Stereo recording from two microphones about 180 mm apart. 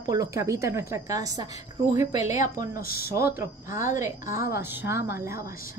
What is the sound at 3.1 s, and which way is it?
A woman's voice, 15° right (ahead or behind).